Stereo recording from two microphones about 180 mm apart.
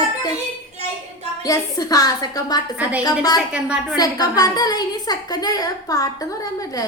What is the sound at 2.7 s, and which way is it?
Speech, 10° right (ahead or behind).